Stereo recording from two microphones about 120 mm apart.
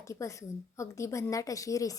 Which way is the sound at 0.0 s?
25° left (ahead or behind).